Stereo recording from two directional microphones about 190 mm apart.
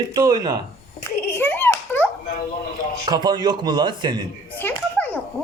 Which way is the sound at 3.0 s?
20° right (ahead or behind).